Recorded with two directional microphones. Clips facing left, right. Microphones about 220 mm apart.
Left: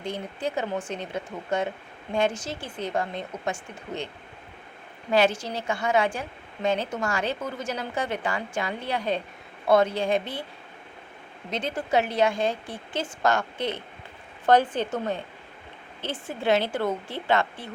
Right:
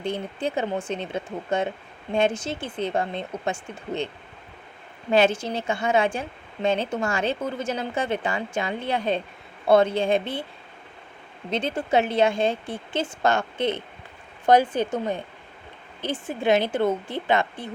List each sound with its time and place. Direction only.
0.0 s a woman's voice: 25° right (ahead or behind)
5.1 s a woman's voice: 25° right (ahead or behind)
11.5 s a woman's voice: 25° right (ahead or behind)
14.4 s speech: 10° right (ahead or behind)